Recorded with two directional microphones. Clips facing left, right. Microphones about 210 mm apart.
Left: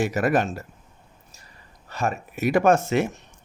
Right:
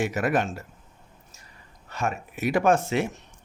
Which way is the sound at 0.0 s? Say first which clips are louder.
Left 3 dB; 40° left (ahead or behind).